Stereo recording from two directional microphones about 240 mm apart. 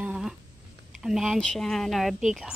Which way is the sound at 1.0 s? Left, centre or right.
Centre.